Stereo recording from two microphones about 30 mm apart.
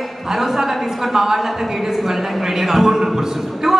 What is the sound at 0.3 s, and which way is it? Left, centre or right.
A woman's voice, centre.